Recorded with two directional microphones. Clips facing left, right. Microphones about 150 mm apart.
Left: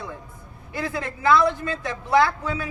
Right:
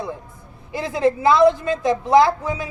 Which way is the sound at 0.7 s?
15° right (ahead or behind).